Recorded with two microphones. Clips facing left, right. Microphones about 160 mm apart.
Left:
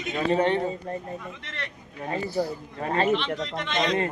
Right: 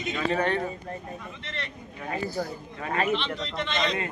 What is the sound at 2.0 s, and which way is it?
Speech, 30° left (ahead or behind).